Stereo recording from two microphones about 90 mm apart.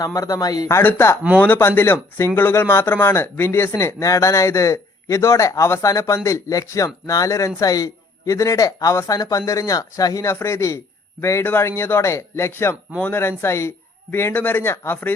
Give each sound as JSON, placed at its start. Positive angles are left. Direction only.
{"t": 0.0, "sound": "speech", "side_deg": 40}
{"t": 0.8, "sound": "a man's voice", "side_deg": 20}